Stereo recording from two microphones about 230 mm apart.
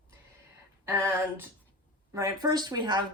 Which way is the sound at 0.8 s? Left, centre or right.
Centre.